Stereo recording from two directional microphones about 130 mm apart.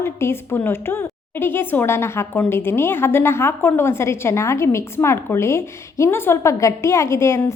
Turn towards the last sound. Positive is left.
turn(degrees=20)  # may be behind; listen again after turning